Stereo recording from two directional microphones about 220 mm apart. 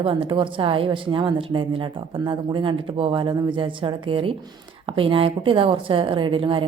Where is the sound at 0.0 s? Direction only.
25° right (ahead or behind).